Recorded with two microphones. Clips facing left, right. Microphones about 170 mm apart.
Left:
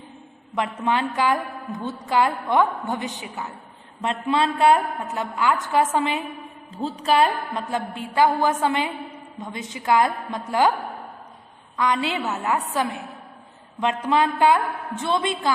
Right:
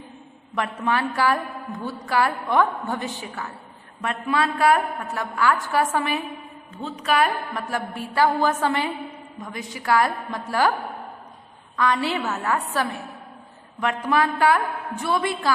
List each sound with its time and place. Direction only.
0.5 s a woman's voice: 20° left (ahead or behind)
6.8 s a woman's voice: 30° left (ahead or behind)
11.8 s a woman's voice: 20° left (ahead or behind)